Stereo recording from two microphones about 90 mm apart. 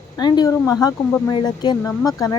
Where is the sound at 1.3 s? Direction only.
55° left (ahead or behind).